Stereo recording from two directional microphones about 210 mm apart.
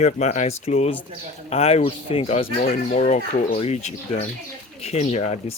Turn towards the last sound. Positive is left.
turn(degrees=30)  # may be behind; listen again after turning